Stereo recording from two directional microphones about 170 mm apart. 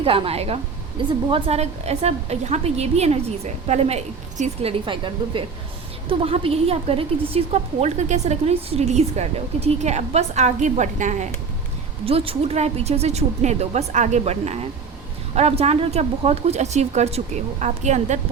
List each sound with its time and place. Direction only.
0.0 s a woman's voice: 35° right (ahead or behind)
12.0 s a woman's voice: 35° right (ahead or behind)